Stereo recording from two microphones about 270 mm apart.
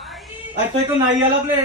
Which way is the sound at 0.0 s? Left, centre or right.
Centre.